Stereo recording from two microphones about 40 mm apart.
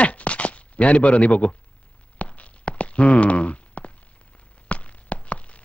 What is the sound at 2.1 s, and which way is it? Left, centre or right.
Walk, left.